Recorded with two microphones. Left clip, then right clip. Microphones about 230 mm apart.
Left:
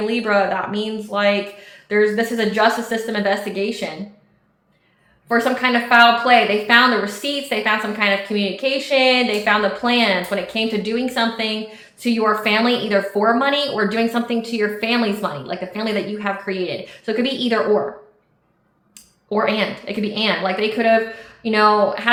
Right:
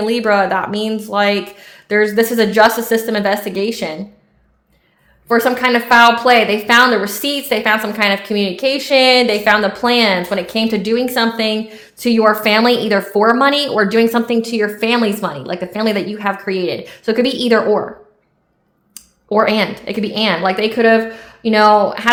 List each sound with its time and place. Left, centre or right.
0.0 s a woman's voice: right
5.3 s a woman's voice: right
19.3 s a woman's voice: right